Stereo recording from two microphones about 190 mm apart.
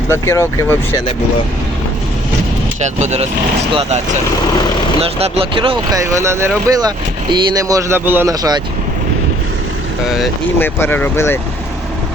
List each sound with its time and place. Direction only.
0.1 s speech: 15° left (ahead or behind)
2.8 s speech: 35° right (ahead or behind); by 8.6 s 20° right (ahead or behind)
10.6 s speech: 10° left (ahead or behind)